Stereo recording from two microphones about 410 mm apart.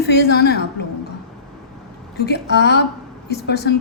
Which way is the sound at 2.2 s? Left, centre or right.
Left.